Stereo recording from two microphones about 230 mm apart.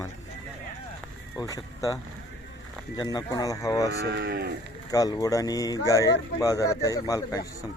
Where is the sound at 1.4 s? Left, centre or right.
Centre.